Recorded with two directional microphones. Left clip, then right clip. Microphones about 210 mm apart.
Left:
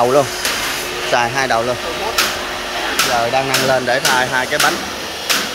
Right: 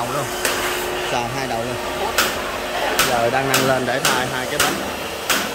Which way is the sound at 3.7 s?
10° right (ahead or behind).